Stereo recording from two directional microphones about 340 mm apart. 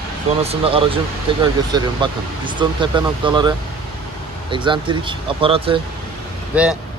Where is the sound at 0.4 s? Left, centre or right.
Centre.